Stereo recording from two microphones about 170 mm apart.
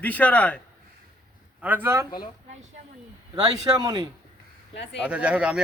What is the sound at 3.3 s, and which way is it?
Speech, 25° right (ahead or behind).